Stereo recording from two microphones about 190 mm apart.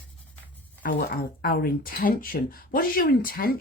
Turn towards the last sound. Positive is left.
turn(degrees=50)  # may be behind; listen again after turning